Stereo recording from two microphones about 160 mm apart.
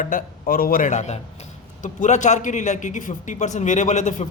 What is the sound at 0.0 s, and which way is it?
A man's voice, 60° left (ahead or behind).